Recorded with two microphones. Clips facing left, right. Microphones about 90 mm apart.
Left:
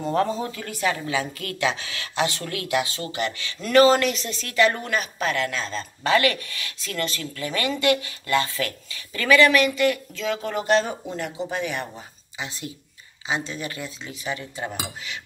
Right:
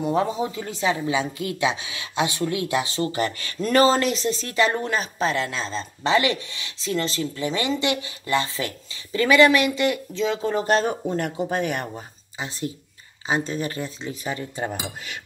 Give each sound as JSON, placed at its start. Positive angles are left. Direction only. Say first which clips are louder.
{"t": 0.0, "sound": "speech", "louder": "right 1 dB", "side_deg": -15}
{"t": 12.4, "sound": "speech", "louder": "right 4 dB", "side_deg": -35}